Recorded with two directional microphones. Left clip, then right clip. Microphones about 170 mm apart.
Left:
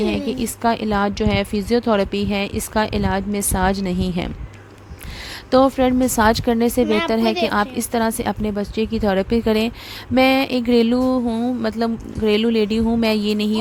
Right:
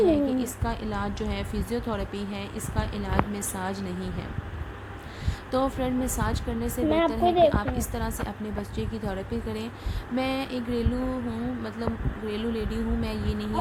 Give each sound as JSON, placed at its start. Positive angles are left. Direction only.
{"t": 0.0, "sound": "speech", "side_deg": 50}
{"t": 5.5, "sound": "speech", "side_deg": 45}